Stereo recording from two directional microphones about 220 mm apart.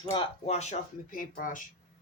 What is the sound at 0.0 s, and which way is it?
Speech, 25° left (ahead or behind).